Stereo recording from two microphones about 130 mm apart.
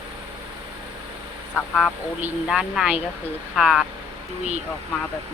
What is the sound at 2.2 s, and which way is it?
Speech, 5° right (ahead or behind).